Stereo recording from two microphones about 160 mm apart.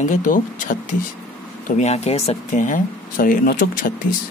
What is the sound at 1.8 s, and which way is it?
Speech, 45° left (ahead or behind).